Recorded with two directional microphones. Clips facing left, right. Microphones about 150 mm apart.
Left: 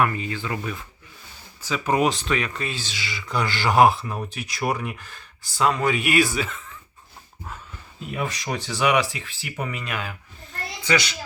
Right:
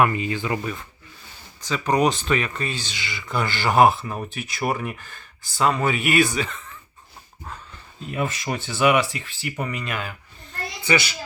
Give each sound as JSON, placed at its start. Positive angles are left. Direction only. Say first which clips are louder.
{"t": 0.0, "sound": "speech", "louder": "right 3 dB", "side_deg": -15}
{"t": 0.5, "sound": "speech", "louder": "right 3 dB", "side_deg": 0}
{"t": 8.1, "sound": "speech", "louder": "right 2 dB", "side_deg": 0}